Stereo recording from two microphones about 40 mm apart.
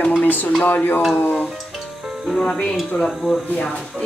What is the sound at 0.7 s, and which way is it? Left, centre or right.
Speech, left.